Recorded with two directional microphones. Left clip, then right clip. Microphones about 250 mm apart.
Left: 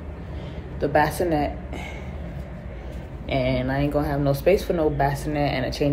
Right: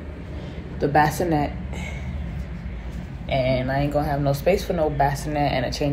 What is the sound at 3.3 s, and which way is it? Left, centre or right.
Speech, centre.